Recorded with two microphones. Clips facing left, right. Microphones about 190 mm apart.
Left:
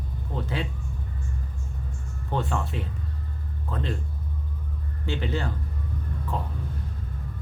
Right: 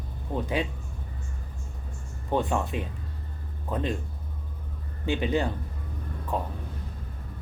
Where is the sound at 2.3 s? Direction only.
15° right (ahead or behind).